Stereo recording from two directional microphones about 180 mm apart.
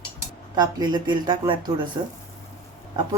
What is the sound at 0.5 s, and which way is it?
Speech, 25° right (ahead or behind).